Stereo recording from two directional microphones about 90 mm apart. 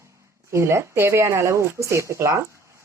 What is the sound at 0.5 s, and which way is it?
Speech, 30° right (ahead or behind).